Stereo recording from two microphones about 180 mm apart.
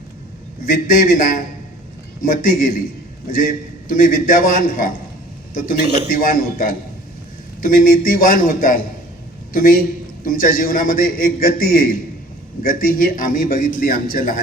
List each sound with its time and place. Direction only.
0.6 s a man's voice: 50° left (ahead or behind)
6.1 s a man's voice: 50° left (ahead or behind)